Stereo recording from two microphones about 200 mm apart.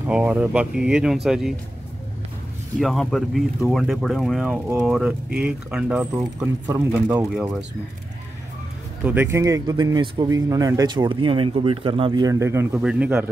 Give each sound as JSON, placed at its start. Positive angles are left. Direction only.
{"t": 0.1, "sound": "speech", "side_deg": -5}
{"t": 2.8, "sound": "speech", "side_deg": 0}
{"t": 9.0, "sound": "speech", "side_deg": -10}